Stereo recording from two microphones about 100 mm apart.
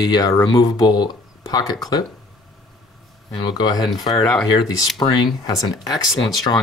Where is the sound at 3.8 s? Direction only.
Centre (ahead or behind).